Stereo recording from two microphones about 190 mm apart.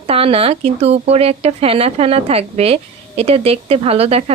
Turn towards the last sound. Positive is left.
turn(degrees=-30)  # may be behind; listen again after turning